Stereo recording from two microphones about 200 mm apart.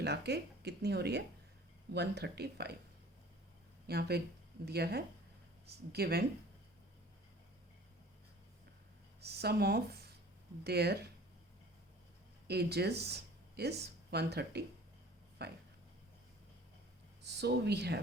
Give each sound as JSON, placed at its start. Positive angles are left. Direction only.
{"t": 0.0, "sound": "speech", "side_deg": -55}
{"t": 3.8, "sound": "speech", "side_deg": -55}
{"t": 9.2, "sound": "speech", "side_deg": -55}
{"t": 12.5, "sound": "speech", "side_deg": -55}
{"t": 17.2, "sound": "speech", "side_deg": -55}